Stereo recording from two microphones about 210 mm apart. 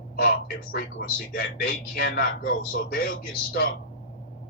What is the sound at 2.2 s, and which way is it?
Speech, 45° left (ahead or behind).